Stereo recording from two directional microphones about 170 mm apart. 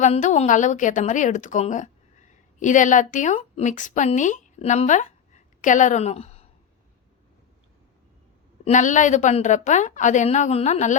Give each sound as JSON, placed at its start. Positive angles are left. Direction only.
{"t": 0.0, "sound": "a woman's voice", "side_deg": 45}
{"t": 8.6, "sound": "a woman's voice", "side_deg": 45}